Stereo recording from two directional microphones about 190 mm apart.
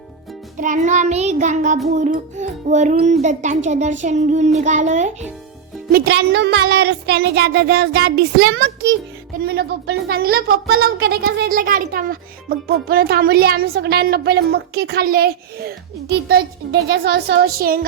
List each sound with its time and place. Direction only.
0.5 s music: 40° right (ahead or behind)
5.9 s speech: 60° right (ahead or behind)
9.5 s speech: 55° right (ahead or behind)